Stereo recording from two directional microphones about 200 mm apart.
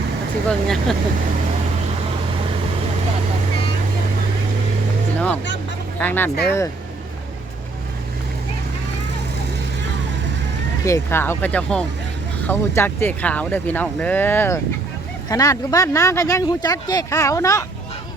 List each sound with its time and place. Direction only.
0.4 s speech: centre (ahead or behind)
6.0 s speech: 10° left (ahead or behind)
10.8 s speech: 15° left (ahead or behind)